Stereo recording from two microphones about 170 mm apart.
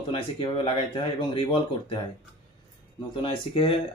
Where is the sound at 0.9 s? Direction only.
30° left (ahead or behind).